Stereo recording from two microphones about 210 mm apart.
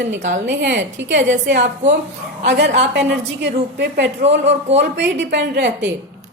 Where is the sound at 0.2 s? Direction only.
35° right (ahead or behind).